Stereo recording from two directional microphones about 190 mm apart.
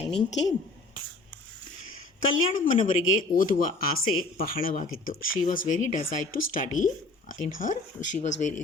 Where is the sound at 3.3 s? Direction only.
45° left (ahead or behind).